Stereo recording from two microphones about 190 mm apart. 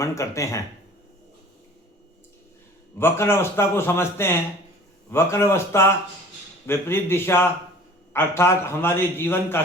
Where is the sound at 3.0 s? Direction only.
15° left (ahead or behind).